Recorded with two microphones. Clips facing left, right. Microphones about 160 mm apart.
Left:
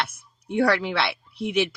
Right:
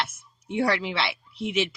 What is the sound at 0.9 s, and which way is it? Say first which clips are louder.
Speech: left 3 dB; 60° left (ahead or behind).